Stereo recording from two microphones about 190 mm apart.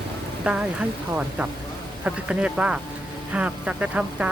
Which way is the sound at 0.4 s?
5° right (ahead or behind).